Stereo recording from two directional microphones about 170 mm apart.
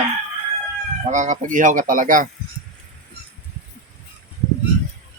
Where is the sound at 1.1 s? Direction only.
45° right (ahead or behind).